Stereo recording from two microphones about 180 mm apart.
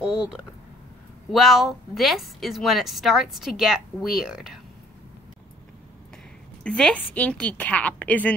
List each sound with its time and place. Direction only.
0.0 s a woman's voice: 5° right (ahead or behind)
6.6 s a woman's voice: 5° left (ahead or behind)